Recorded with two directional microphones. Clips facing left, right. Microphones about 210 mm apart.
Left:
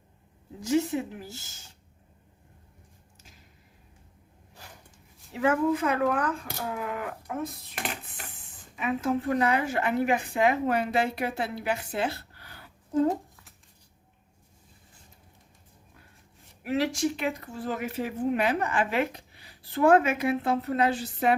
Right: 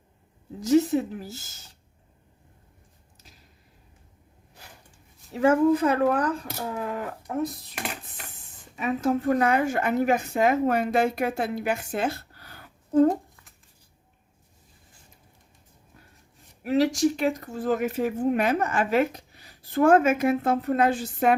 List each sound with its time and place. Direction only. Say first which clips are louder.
0.6 s speech: right 5 dB; 40° right (ahead or behind)
5.3 s speech: right 5 dB; 40° right (ahead or behind)
8.7 s speech: right 3 dB; 40° right (ahead or behind)
13.1 s a sound: right 3 dB; centre (ahead or behind)
16.6 s speech: right 5 dB; 40° right (ahead or behind)